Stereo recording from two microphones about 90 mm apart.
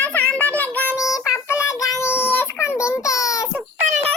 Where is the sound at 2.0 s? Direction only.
25° left (ahead or behind).